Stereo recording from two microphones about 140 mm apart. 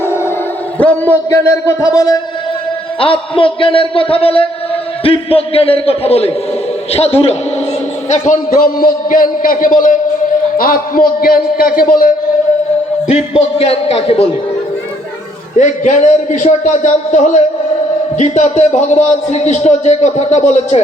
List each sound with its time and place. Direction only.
0.0 s dog: 15° left (ahead or behind)
0.8 s a man's voice: 10° left (ahead or behind)
1.3 s speech: 20° left (ahead or behind)
3.0 s a man's voice: 40° left (ahead or behind); by 8.4 s 55° left (ahead or behind)
8.4 s a man's voice: 90° left; by 10.0 s 70° left (ahead or behind)
10.6 s a man's voice: 90° left
13.8 s a man's voice: 45° left (ahead or behind)
15.5 s a man's voice: 60° left (ahead or behind)